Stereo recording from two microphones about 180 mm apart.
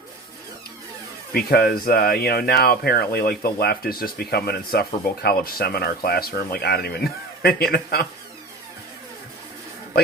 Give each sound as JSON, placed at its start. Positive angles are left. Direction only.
{"t": 1.3, "sound": "speech", "side_deg": 60}